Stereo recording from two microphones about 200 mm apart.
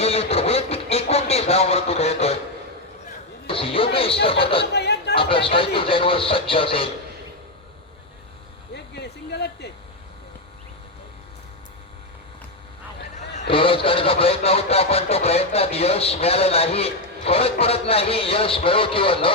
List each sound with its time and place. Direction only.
0.0 s vehicle: 30° left (ahead or behind)
3.4 s music: 25° left (ahead or behind)
4.6 s a sound: 55° left (ahead or behind)
5.1 s speech: 25° left (ahead or behind)
8.7 s a sound: 55° left (ahead or behind)
13.5 s speech: 25° left (ahead or behind)